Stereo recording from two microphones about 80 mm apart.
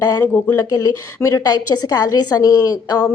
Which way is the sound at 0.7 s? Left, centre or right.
Left.